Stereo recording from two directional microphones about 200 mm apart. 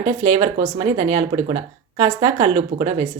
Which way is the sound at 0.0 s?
30° right (ahead or behind).